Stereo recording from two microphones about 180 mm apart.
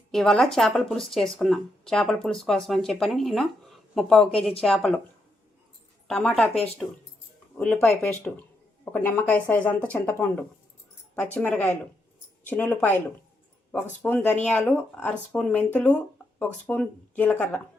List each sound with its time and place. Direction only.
0.1 s speech: centre (ahead or behind)
6.1 s speech: centre (ahead or behind)
7.6 s speech: 10° left (ahead or behind)
11.3 s speech: 10° left (ahead or behind)